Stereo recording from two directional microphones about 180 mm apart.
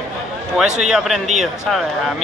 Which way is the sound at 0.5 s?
5° right (ahead or behind).